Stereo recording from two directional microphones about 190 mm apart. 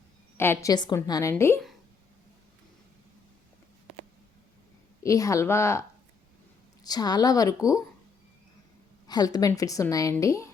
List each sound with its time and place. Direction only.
0.3 s a woman's voice: 10° left (ahead or behind)
5.0 s a woman's voice: 15° left (ahead or behind)
6.8 s a woman's voice: 20° left (ahead or behind)
9.0 s a woman's voice: 20° left (ahead or behind)